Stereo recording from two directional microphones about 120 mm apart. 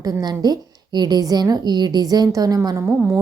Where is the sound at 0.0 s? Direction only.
30° right (ahead or behind).